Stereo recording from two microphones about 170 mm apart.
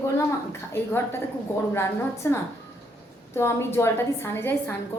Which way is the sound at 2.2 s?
15° left (ahead or behind).